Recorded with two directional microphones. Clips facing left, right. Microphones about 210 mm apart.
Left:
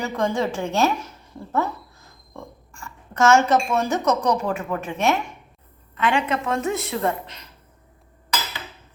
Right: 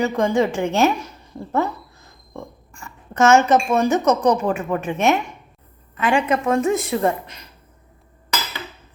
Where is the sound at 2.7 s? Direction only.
20° right (ahead or behind).